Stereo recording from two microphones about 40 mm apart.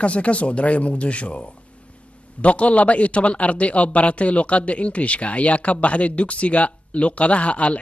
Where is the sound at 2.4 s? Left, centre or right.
Left.